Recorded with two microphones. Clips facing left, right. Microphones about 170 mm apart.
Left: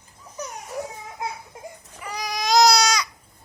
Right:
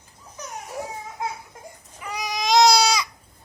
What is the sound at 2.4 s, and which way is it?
Baby cry, 25° right (ahead or behind).